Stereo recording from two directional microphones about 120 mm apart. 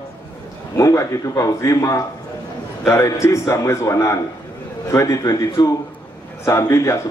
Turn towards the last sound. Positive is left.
turn(degrees=25)  # may be behind; listen again after turning